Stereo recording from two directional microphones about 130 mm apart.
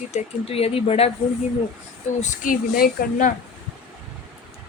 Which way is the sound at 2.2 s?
80° left.